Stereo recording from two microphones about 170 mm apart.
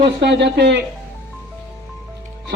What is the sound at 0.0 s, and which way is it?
Speech, 85° right.